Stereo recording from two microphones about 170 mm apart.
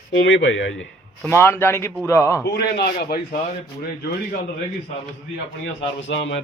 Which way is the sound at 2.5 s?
70° left (ahead or behind).